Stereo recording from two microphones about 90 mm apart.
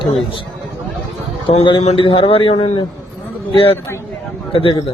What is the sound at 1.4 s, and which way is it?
A man's voice, 85° left.